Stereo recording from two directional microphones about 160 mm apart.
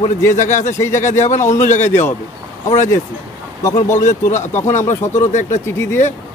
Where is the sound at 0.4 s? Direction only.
50° left (ahead or behind).